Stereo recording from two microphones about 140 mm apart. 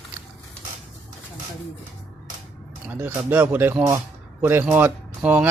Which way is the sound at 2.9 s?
10° right (ahead or behind).